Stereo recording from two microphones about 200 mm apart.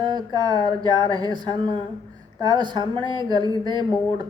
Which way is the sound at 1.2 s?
20° right (ahead or behind).